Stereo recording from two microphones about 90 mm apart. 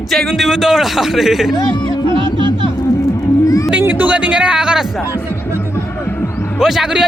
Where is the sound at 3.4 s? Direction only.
40° left (ahead or behind).